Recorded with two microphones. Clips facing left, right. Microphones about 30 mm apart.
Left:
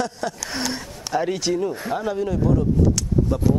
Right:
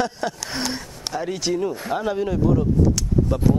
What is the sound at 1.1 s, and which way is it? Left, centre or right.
Speech, centre.